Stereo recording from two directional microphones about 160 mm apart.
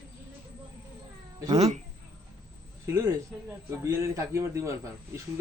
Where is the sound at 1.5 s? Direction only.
40° right (ahead or behind).